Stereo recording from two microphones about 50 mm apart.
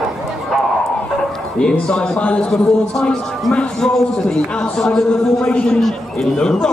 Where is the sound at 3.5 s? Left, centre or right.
Left.